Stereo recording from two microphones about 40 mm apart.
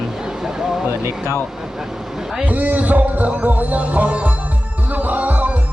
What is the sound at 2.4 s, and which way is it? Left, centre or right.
Music, right.